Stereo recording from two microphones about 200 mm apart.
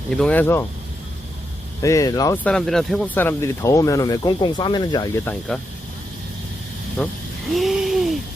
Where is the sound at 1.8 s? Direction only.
15° left (ahead or behind).